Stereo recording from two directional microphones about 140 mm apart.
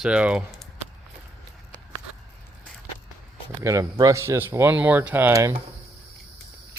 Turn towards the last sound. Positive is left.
turn(degrees=-20)  # may be behind; listen again after turning